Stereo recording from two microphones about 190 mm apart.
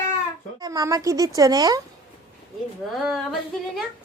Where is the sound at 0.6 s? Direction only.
20° right (ahead or behind).